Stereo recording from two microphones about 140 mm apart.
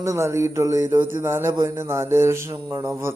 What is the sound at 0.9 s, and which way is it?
Music, 15° right (ahead or behind).